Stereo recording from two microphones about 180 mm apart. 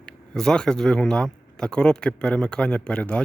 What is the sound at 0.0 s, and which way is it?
Speech, 5° left (ahead or behind).